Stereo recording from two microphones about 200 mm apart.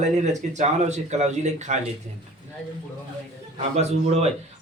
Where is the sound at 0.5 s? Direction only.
35° right (ahead or behind).